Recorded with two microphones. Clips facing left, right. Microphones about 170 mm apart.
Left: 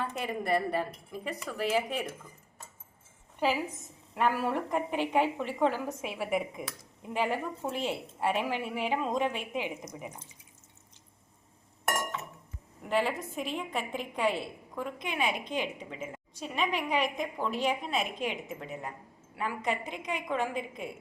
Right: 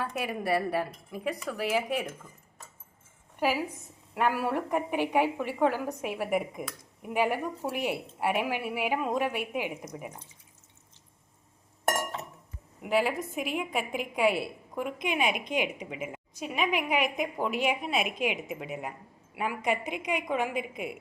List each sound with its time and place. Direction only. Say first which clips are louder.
0.0 s a woman's voice: right 1 dB; 10° right (ahead or behind)
3.4 s a woman's voice: right 1 dB; 10° right (ahead or behind)
11.9 s chink: right 3 dB; 35° right (ahead or behind)
12.8 s a woman's voice: right 2 dB; 10° right (ahead or behind)